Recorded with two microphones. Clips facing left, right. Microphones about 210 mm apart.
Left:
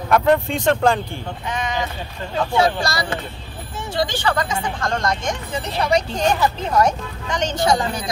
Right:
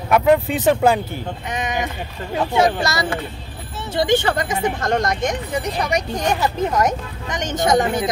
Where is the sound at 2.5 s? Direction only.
20° right (ahead or behind).